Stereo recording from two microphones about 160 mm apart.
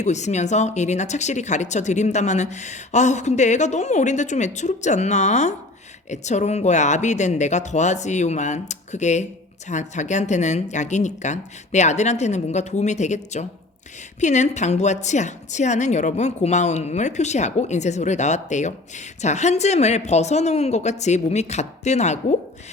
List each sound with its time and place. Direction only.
0.0 s a woman's voice: 45° left (ahead or behind)